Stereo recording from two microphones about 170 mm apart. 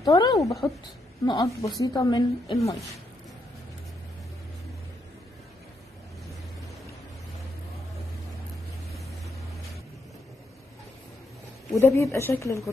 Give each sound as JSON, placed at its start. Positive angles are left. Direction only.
{"t": 0.0, "sound": "speech", "side_deg": 25}
{"t": 0.6, "sound": "speech", "side_deg": 10}
{"t": 1.2, "sound": "a woman's voice", "side_deg": 25}
{"t": 11.7, "sound": "speech", "side_deg": 15}